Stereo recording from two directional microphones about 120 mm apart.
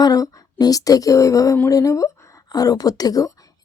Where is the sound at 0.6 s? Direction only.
30° left (ahead or behind).